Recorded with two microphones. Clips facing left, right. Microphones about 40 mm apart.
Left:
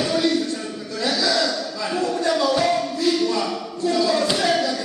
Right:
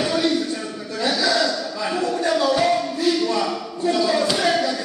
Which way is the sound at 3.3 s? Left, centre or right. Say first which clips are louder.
Right 1 dB; right.